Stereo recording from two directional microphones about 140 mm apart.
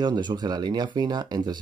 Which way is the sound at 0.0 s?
30° right (ahead or behind).